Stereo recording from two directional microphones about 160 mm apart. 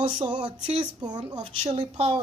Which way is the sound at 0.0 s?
30° right (ahead or behind).